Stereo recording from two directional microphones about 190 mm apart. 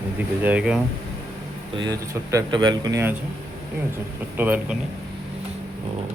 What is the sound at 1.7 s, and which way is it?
Speech, 20° right (ahead or behind).